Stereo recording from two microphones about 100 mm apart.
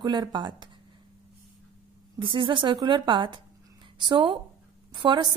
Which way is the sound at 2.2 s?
55° right (ahead or behind).